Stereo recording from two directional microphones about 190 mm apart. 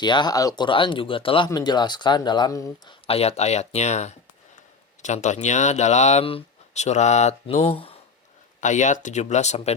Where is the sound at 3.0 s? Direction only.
30° left (ahead or behind).